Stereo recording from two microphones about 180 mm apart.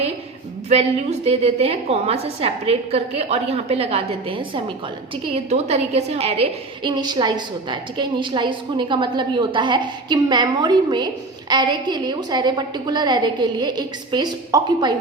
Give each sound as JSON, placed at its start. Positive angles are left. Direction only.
{"t": 0.7, "sound": "a woman's voice", "side_deg": -35}